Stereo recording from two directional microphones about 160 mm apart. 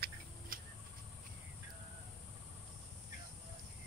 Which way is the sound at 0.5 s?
60° right (ahead or behind).